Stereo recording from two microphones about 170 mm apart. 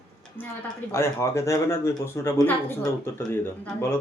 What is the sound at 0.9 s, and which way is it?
Speech, 15° left (ahead or behind).